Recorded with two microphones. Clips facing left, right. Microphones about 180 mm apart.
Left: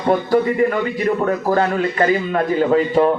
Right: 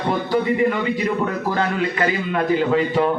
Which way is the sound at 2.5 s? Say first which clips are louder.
Left 5 dB; 40° left (ahead or behind).